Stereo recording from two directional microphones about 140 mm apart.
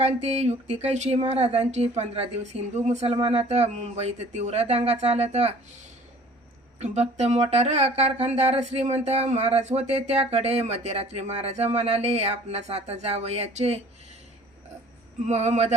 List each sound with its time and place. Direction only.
0.0 s speech: 50° right (ahead or behind)
6.7 s speech: 50° right (ahead or behind)
15.3 s speech: 50° right (ahead or behind)